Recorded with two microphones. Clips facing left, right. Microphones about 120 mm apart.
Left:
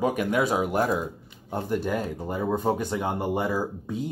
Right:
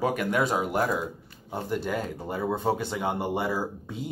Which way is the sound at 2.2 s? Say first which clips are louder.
Left 2 dB; 10° left (ahead or behind).